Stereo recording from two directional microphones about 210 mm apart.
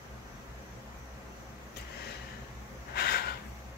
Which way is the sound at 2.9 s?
45° left (ahead or behind).